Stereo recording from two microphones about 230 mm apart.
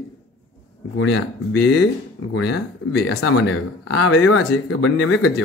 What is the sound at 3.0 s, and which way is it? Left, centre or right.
Speech, left.